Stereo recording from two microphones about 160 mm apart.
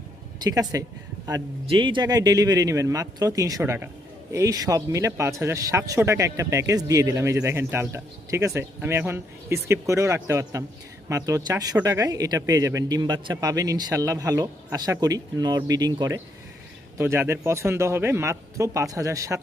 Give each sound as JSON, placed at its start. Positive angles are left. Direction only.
{"t": 0.3, "sound": "a man's voice", "side_deg": -25}